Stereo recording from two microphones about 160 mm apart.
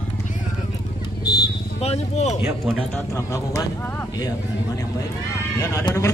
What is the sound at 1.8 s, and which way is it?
Speech, 45° left (ahead or behind).